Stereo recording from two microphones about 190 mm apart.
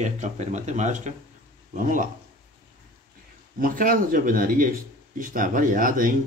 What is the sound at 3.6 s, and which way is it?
Speech, 50° right (ahead or behind).